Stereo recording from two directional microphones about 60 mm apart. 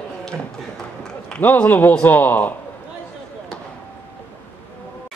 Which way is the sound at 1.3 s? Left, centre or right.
Left.